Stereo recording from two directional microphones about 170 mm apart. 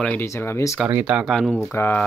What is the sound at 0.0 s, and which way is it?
Speech, 10° left (ahead or behind).